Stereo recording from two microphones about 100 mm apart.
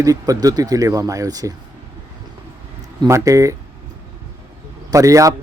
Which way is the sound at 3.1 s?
30° right (ahead or behind).